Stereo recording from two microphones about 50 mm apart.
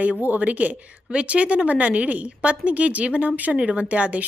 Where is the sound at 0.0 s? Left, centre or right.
Right.